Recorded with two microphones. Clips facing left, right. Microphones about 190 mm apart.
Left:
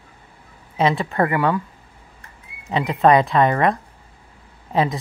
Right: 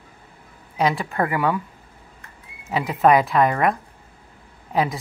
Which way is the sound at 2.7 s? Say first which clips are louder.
Left 1 dB; 5° right (ahead or behind).